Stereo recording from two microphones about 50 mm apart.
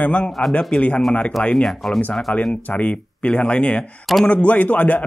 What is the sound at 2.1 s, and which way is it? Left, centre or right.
A man's voice, centre.